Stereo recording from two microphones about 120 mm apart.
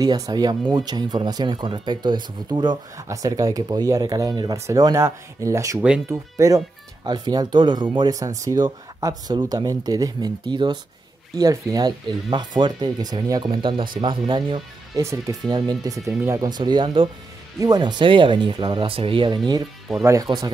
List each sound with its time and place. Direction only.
0.0 s speech: 35° right (ahead or behind)
8.1 s speech: 30° right (ahead or behind)
15.0 s speech: 25° right (ahead or behind)
20.0 s speech: 25° right (ahead or behind)